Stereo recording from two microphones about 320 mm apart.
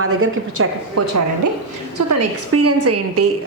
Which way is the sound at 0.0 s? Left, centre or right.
Right.